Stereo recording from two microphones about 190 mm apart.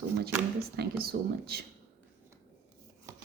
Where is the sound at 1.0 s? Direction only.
55° right (ahead or behind).